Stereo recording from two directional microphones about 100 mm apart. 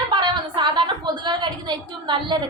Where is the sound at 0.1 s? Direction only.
50° right (ahead or behind).